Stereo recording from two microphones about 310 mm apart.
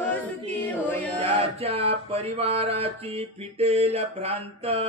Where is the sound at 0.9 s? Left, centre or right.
Centre.